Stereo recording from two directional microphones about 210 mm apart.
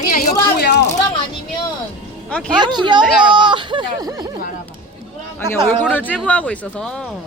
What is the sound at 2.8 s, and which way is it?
Speech, 20° right (ahead or behind).